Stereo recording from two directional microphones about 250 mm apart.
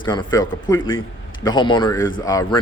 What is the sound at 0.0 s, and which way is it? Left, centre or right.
A man's voice, centre.